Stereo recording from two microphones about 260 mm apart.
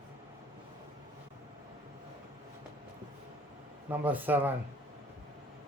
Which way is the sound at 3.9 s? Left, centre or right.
Centre.